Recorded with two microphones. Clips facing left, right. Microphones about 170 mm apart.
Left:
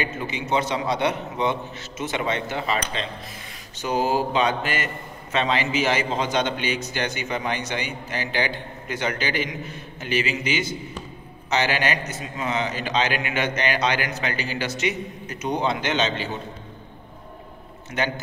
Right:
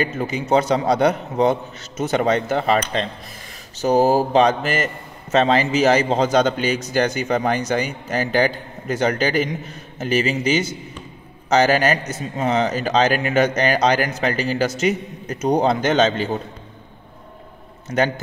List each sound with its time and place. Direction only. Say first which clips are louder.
0.0 s a man's voice: right 6 dB; 40° right (ahead or behind)
17.9 s a man's voice: right 7 dB; 35° right (ahead or behind)